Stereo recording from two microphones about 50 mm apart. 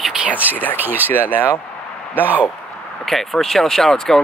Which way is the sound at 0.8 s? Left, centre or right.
Right.